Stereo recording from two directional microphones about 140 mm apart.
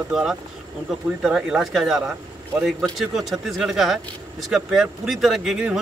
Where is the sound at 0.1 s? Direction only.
Centre (ahead or behind).